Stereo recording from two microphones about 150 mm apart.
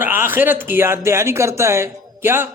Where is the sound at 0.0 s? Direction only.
15° right (ahead or behind).